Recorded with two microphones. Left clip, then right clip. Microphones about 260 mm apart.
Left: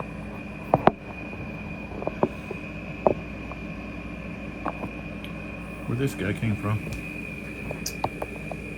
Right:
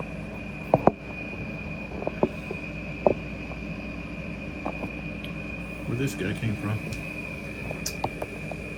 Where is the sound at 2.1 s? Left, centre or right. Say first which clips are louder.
Left 1 dB; right.